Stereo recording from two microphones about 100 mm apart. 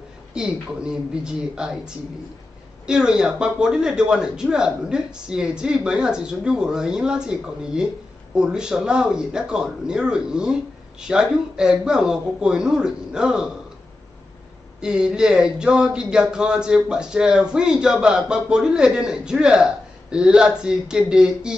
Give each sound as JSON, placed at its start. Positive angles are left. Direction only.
{"t": 0.3, "sound": "speech", "side_deg": -10}
{"t": 2.9, "sound": "speech", "side_deg": -5}
{"t": 14.8, "sound": "speech", "side_deg": -5}